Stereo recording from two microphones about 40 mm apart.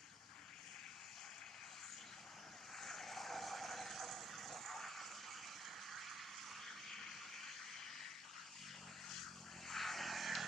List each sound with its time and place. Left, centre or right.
2.8 s vehicle: centre
5.9 s a sound: centre
9.1 s vehicle: centre